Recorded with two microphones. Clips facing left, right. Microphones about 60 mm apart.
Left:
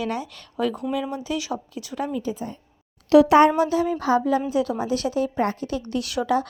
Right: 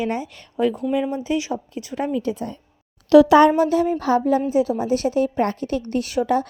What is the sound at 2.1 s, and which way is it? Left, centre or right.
Speech, right.